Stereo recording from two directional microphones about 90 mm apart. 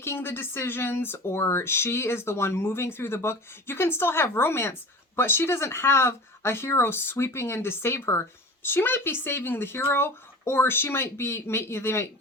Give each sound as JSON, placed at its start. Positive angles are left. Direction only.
{"t": 0.0, "sound": "speech", "side_deg": 25}